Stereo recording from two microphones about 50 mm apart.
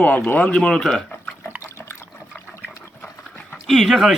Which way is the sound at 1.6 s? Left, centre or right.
Left.